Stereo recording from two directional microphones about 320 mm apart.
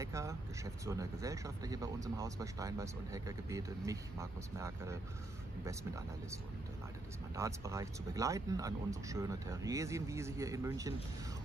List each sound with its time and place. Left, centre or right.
0.0 s speech: centre
7.3 s speech: centre